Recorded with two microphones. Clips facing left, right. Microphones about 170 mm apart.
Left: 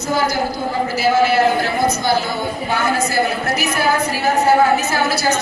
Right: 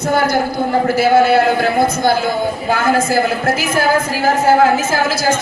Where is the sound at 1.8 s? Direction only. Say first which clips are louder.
Right 3 dB; 55° right (ahead or behind).